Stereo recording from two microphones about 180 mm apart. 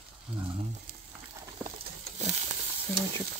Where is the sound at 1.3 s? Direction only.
20° right (ahead or behind).